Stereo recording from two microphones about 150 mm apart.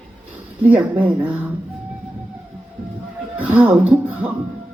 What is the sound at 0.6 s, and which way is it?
Speech, 10° right (ahead or behind).